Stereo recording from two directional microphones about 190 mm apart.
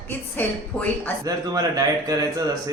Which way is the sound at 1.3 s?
20° right (ahead or behind).